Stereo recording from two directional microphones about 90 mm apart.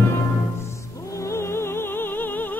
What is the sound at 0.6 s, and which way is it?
Music, 35° left (ahead or behind).